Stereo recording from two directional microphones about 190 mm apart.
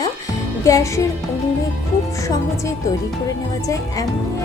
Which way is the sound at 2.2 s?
15° left (ahead or behind).